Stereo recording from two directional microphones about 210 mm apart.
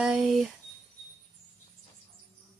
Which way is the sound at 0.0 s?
Centre (ahead or behind).